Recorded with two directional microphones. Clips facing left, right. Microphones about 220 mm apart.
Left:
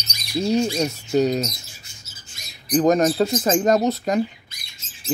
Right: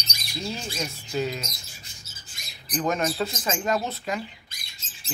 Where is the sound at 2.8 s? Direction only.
40° left (ahead or behind).